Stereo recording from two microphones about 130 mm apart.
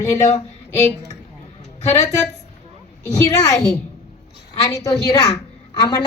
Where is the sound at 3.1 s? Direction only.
25° left (ahead or behind).